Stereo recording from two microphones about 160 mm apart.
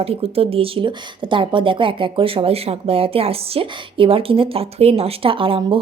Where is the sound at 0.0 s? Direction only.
40° right (ahead or behind).